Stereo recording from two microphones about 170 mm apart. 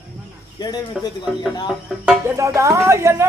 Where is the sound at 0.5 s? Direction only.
25° left (ahead or behind).